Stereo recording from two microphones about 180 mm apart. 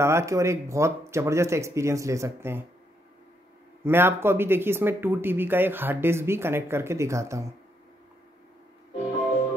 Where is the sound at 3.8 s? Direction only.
10° right (ahead or behind).